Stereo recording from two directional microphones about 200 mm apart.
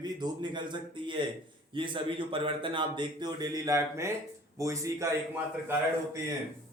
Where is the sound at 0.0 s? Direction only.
20° right (ahead or behind).